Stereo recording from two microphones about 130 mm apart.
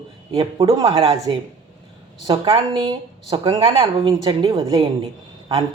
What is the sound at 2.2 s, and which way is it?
Speech, 40° right (ahead or behind).